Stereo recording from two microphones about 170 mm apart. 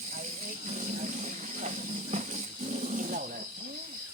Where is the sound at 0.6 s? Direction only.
45° right (ahead or behind).